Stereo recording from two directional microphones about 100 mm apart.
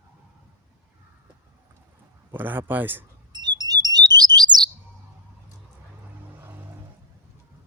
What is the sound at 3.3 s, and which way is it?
Alarm, 45° right (ahead or behind).